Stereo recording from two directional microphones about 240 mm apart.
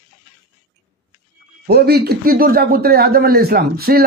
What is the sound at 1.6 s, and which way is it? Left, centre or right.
Speech, right.